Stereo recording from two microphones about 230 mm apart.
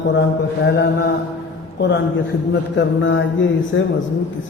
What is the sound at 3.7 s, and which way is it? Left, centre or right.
Speech, left.